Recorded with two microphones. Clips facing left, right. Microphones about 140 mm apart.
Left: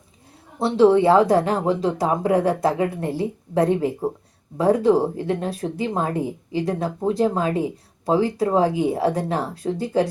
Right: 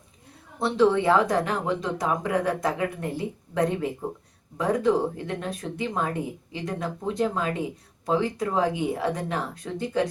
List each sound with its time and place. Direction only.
0.6 s speech: 30° left (ahead or behind)